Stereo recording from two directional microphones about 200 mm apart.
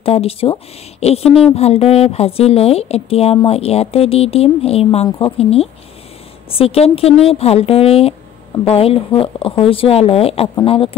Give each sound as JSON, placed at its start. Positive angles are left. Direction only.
{"t": 0.0, "sound": "a woman's voice", "side_deg": 30}